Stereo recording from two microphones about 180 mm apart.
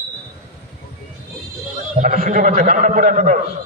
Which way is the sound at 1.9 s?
55° right (ahead or behind).